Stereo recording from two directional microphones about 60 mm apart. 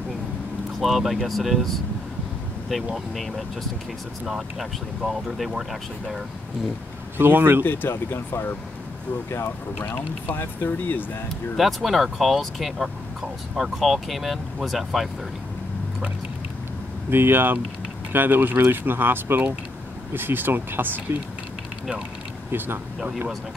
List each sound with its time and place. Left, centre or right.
0.7 s speech: centre
4.3 s speech: centre
7.2 s speech: right
7.6 s speech: left
11.5 s speech: centre
17.1 s speech: right
22.9 s speech: centre